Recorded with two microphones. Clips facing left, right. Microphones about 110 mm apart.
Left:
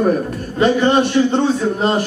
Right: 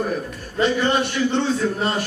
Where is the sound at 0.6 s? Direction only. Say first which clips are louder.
Left 6 dB; 35° left (ahead or behind).